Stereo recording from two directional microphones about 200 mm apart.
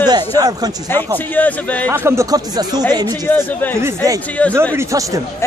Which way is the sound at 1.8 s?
15° right (ahead or behind).